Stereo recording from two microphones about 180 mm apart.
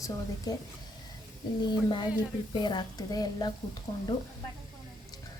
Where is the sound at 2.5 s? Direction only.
25° left (ahead or behind).